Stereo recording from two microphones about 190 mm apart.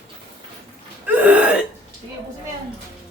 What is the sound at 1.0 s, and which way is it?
Gasp, 5° right (ahead or behind).